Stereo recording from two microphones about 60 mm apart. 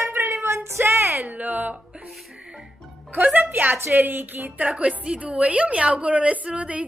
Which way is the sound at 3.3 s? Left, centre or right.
Right.